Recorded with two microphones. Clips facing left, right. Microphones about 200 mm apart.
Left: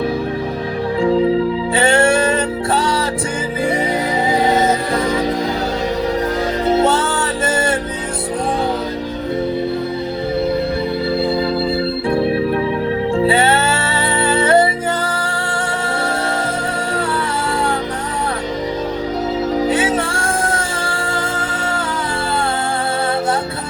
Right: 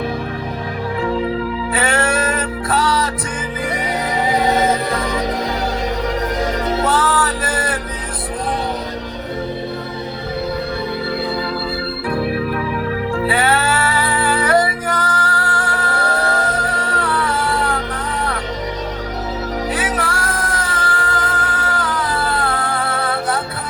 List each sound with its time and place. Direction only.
1.7 s music: 30° left (ahead or behind)
6.7 s music: 25° left (ahead or behind)
12.0 s organ: 25° left (ahead or behind)
13.1 s music: 25° left (ahead or behind)
19.6 s music: 25° left (ahead or behind)